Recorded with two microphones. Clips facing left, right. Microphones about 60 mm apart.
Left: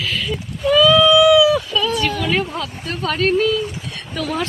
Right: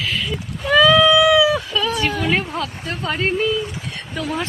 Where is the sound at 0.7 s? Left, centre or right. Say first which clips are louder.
Even; right.